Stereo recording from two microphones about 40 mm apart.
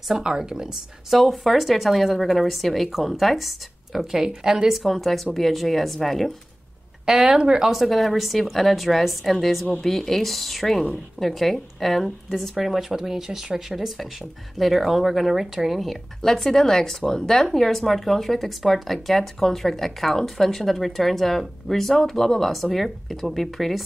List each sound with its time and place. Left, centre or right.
0.1 s speech: centre
4.4 s speech: centre
4.6 s speech: centre
7.1 s speech: centre
12.5 s speech: centre